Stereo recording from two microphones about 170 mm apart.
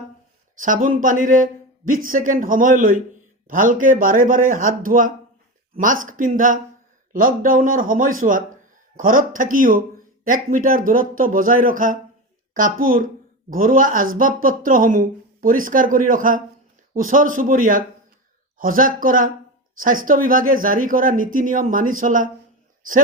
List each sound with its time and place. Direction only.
0.6 s speech: 50° right (ahead or behind)